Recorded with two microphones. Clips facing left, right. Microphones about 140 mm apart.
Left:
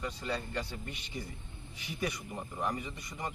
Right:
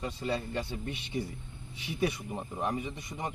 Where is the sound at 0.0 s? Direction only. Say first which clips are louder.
Right 3 dB; 25° right (ahead or behind).